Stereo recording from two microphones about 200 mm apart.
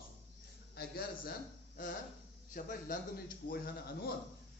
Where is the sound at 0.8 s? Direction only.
50° left (ahead or behind).